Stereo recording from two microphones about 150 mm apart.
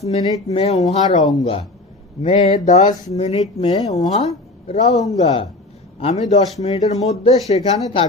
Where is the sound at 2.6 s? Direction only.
50° left (ahead or behind).